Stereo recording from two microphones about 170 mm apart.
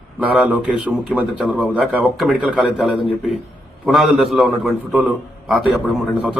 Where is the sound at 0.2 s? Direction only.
10° right (ahead or behind).